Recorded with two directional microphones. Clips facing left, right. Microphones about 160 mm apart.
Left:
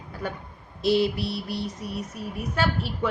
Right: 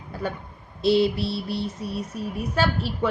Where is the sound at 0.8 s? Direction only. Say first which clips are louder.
Right 2 dB; 25° right (ahead or behind).